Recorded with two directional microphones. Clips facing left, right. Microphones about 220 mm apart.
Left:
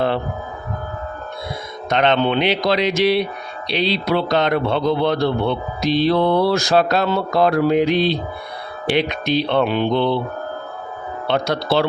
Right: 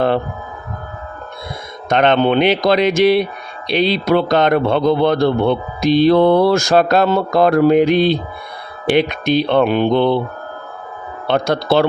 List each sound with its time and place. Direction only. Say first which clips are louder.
1.9 s a man's voice: right 4 dB; 50° right (ahead or behind)
11.3 s a man's voice: right 4 dB; 50° right (ahead or behind)